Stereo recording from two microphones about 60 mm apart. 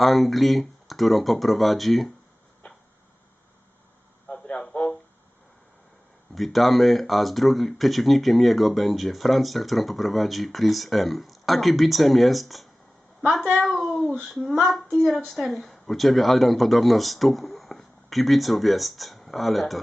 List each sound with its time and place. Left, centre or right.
0.0 s speech: centre
2.6 s a sound: centre
4.3 s radio: centre
6.3 s a woman's voice: centre